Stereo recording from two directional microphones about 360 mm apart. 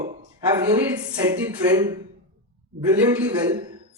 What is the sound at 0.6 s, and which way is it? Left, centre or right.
Speech, centre.